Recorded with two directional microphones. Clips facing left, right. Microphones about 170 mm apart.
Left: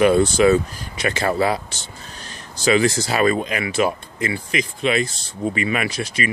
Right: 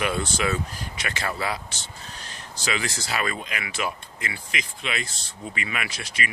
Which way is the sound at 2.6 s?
40° left (ahead or behind).